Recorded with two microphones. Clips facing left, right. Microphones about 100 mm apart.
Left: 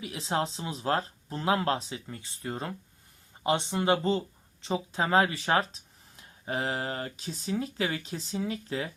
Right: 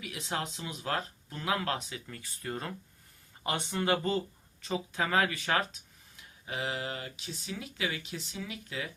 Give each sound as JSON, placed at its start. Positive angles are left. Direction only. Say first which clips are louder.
{"t": 0.0, "sound": "speech", "louder": "left 6 dB", "side_deg": 25}